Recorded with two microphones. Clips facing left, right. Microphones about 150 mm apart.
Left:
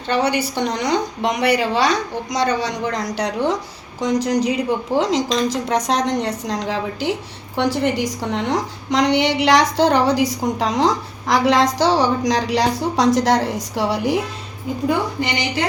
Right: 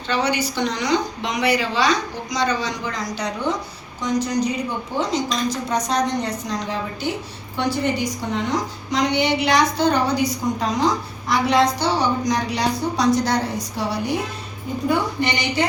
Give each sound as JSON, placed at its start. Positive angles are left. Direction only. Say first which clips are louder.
{"t": 0.1, "sound": "a woman's voice", "louder": "left 3 dB", "side_deg": 60}
{"t": 4.0, "sound": "a woman's voice", "louder": "left 3 dB", "side_deg": 90}